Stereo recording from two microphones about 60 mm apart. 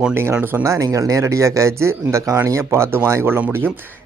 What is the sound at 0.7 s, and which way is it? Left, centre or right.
Speech, right.